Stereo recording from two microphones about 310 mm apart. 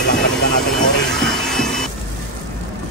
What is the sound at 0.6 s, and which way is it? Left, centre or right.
Vehicle, centre.